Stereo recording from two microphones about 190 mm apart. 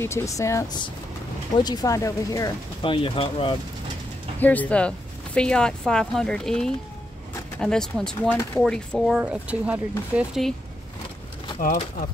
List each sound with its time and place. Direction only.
0.0 s speech: 15° left (ahead or behind)
2.8 s speech: 25° left (ahead or behind)
4.4 s speech: 10° left (ahead or behind)
11.6 s speech: 45° left (ahead or behind)